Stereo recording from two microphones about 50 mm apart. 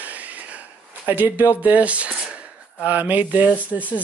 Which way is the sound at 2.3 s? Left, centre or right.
Right.